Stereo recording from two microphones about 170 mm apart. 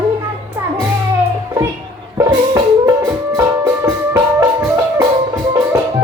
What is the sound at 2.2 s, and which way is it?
Music, 20° right (ahead or behind).